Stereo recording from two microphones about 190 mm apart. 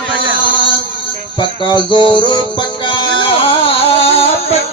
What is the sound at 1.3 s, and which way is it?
Music, 25° left (ahead or behind).